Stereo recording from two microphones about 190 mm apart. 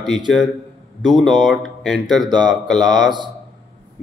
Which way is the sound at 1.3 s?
Centre (ahead or behind).